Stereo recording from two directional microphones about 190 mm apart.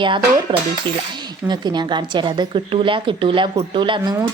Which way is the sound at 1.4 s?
20° right (ahead or behind).